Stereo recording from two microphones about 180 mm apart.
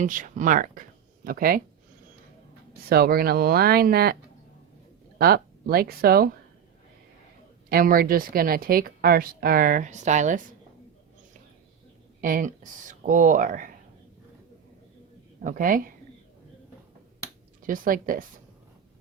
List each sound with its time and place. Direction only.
0.0 s speech: 45° right (ahead or behind)
2.9 s speech: 55° right (ahead or behind)
7.7 s speech: 55° right (ahead or behind)
12.2 s speech: 50° right (ahead or behind)
15.4 s speech: 50° right (ahead or behind)
17.6 s speech: 50° right (ahead or behind)